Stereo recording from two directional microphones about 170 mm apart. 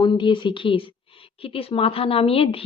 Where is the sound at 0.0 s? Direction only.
25° left (ahead or behind).